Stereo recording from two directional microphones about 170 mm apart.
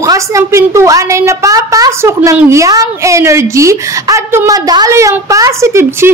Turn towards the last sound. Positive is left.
turn(degrees=-15)  # may be behind; listen again after turning